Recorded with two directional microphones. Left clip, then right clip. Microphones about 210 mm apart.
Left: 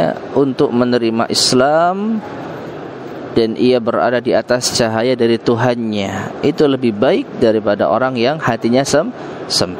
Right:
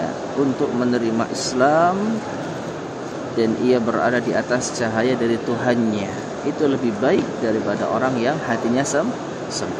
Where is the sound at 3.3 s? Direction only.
50° left (ahead or behind).